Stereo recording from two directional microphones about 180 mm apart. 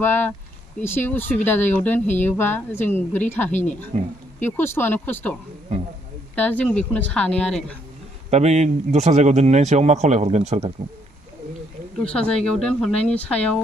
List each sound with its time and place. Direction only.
0.0 s a woman's voice: 10° left (ahead or behind)
3.9 s speech: 35° right (ahead or behind)
4.5 s a woman's voice: 10° left (ahead or behind)
6.3 s a woman's voice: 10° left (ahead or behind)
8.3 s speech: 40° right (ahead or behind)
12.0 s speech: 5° left (ahead or behind)